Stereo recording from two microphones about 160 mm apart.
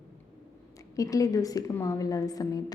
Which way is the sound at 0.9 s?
20° left (ahead or behind).